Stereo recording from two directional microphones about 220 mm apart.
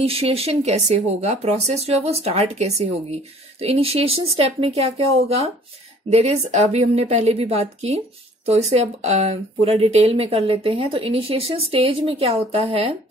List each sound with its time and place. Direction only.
0.0 s speech: 25° right (ahead or behind)